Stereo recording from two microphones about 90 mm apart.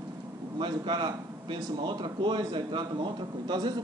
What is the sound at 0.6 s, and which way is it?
A man's voice, 60° right (ahead or behind).